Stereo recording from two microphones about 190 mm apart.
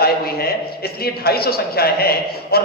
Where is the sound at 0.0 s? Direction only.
55° left (ahead or behind).